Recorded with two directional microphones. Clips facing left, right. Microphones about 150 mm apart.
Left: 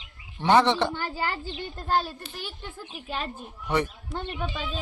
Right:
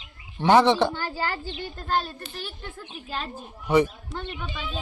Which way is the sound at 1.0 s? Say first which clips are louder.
Right 1 dB; 25° left (ahead or behind).